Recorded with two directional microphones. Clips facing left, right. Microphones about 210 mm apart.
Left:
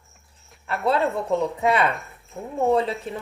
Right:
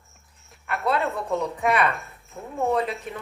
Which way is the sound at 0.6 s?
30° left (ahead or behind).